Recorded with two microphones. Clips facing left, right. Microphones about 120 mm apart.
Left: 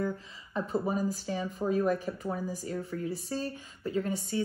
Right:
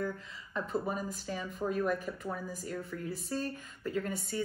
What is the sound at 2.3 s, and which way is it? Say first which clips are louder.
Speech: left 4 dB; 35° left (ahead or behind).